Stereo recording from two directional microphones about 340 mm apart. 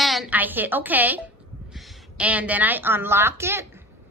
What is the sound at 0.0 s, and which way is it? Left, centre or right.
A woman's voice, centre.